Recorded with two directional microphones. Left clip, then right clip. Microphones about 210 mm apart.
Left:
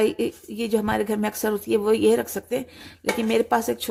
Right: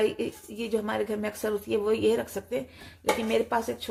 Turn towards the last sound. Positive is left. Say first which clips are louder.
# left 5 dB
turn(degrees=40)  # may be behind; listen again after turning